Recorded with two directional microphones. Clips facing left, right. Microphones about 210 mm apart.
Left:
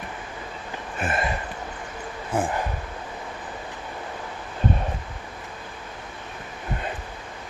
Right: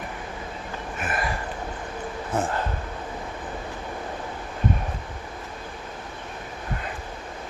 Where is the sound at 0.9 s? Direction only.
25° left (ahead or behind).